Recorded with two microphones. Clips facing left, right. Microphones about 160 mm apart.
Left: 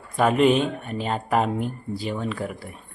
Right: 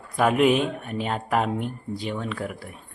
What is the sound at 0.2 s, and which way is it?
Speech, centre (ahead or behind).